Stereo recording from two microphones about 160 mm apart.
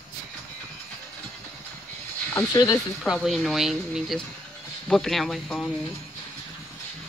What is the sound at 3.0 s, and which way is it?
Speech, centre (ahead or behind).